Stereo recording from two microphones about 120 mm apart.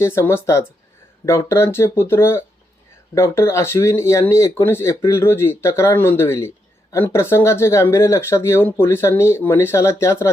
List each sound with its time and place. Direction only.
0.0 s speech: 20° left (ahead or behind)